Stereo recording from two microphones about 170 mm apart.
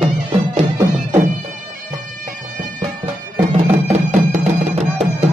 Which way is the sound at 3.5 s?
40° right (ahead or behind).